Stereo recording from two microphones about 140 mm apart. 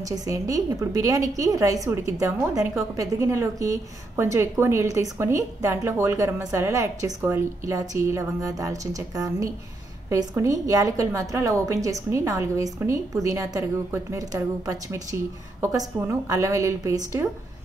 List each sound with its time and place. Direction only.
0.1 s a woman's voice: 25° right (ahead or behind)
16.3 s a woman's voice: 20° right (ahead or behind)